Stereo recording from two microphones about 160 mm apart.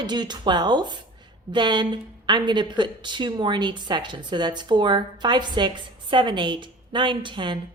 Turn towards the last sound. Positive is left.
turn(degrees=-30)  # may be behind; listen again after turning